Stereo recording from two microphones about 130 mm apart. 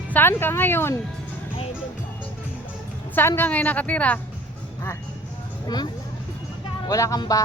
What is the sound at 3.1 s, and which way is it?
A woman's voice, 15° left (ahead or behind).